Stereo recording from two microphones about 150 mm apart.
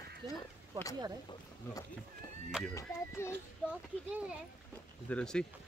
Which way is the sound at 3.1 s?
15° left (ahead or behind).